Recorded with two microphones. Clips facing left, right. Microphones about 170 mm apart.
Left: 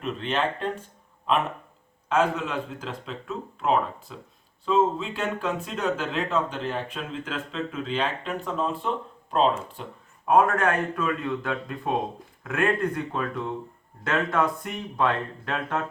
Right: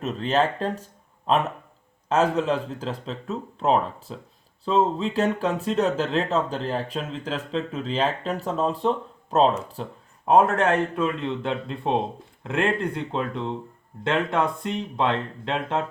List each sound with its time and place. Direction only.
0.0 s speech: 40° right (ahead or behind)
2.0 s speech: 35° right (ahead or behind)